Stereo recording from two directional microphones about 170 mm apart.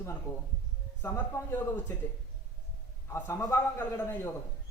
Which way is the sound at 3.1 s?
15° left (ahead or behind).